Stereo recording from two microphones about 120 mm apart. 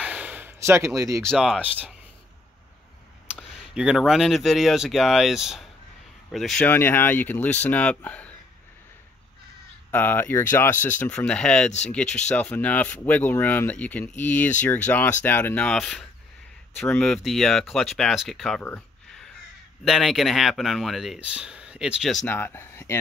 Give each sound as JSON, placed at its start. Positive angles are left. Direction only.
{"t": 0.0, "sound": "a sound", "side_deg": -10}
{"t": 1.2, "sound": "speech", "side_deg": 0}
{"t": 3.3, "sound": "speech", "side_deg": -5}
{"t": 6.6, "sound": "speech", "side_deg": 20}
{"t": 9.8, "sound": "speech", "side_deg": 15}
{"t": 19.8, "sound": "speech", "side_deg": 0}
{"t": 22.2, "sound": "speech", "side_deg": 15}